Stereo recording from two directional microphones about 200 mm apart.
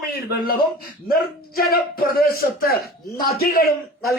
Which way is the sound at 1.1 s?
50° left (ahead or behind).